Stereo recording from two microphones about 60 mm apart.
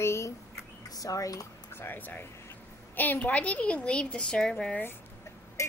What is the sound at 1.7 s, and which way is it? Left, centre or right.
A woman's voice, left.